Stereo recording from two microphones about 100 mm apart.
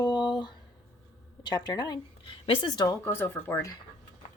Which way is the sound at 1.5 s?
45° left (ahead or behind).